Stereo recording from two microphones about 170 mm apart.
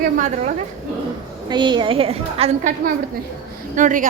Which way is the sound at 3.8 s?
50° right (ahead or behind).